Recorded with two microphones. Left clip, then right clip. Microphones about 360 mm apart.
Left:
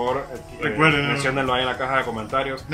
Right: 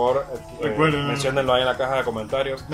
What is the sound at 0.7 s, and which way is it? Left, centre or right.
Speech, centre.